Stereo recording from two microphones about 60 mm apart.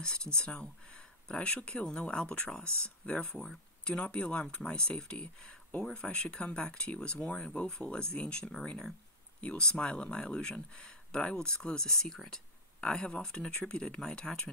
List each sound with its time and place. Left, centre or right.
0.0 s speech: centre
3.3 s speech: centre
3.9 s speech: centre